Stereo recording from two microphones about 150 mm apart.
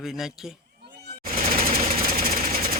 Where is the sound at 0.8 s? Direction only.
90° right.